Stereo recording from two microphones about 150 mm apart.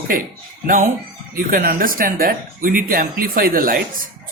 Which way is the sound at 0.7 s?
60° right (ahead or behind).